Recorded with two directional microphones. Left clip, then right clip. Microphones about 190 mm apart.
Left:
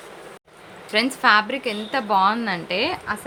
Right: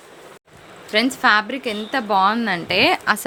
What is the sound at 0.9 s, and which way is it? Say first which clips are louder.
A woman's voice: right 1 dB; 15° right (ahead or behind).